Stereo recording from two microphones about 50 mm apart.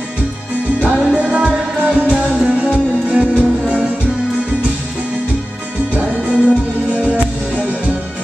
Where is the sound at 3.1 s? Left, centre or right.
Right.